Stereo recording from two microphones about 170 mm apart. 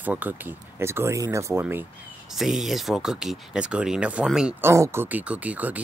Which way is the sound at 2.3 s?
Centre (ahead or behind).